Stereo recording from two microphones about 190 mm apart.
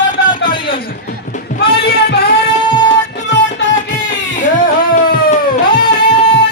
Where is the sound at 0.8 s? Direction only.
45° left (ahead or behind).